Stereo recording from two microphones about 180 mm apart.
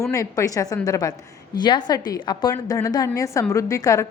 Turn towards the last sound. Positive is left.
turn(degrees=15)  # may be behind; listen again after turning